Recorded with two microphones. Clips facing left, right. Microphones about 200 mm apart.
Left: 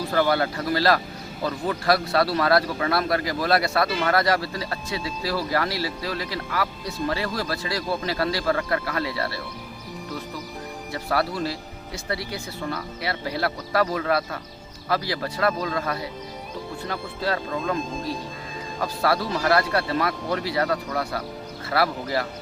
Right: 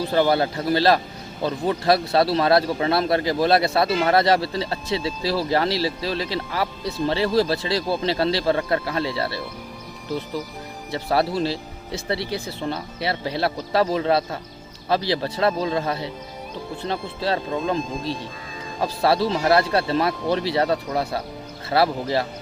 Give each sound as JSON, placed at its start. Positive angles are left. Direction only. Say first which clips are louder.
{"t": 0.0, "sound": "speech", "louder": "right 3 dB", "side_deg": -25}
{"t": 10.9, "sound": "speech", "louder": "right 4 dB", "side_deg": -25}